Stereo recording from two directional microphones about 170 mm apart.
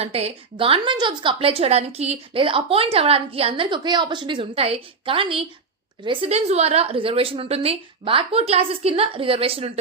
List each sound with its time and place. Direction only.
0.0 s a woman's voice: 40° right (ahead or behind)